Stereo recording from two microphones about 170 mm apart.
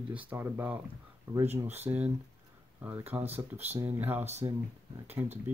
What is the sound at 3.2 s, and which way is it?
Speech, 40° right (ahead or behind).